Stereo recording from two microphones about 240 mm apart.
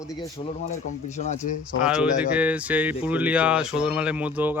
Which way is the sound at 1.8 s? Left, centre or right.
Centre.